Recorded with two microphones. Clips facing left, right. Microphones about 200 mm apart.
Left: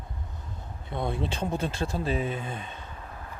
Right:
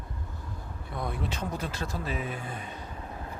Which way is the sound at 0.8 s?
25° left (ahead or behind).